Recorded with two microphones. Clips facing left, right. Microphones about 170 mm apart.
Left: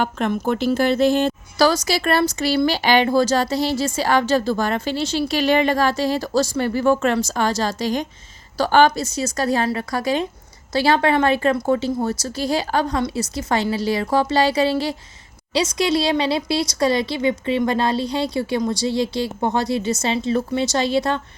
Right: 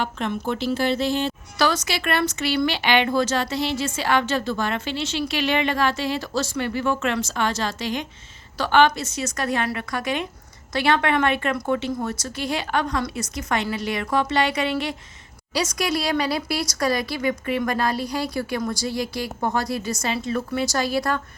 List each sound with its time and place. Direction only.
0.0 s a woman's voice: 45° left (ahead or behind); by 21.2 s 25° left (ahead or behind)